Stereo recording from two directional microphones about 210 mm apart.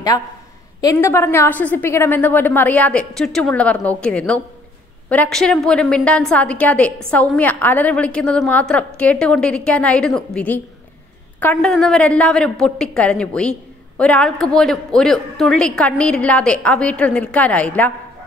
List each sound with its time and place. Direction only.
0.7 s a woman's voice: 15° left (ahead or behind)